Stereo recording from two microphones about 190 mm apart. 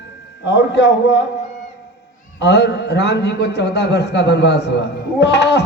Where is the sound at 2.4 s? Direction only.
65° left (ahead or behind).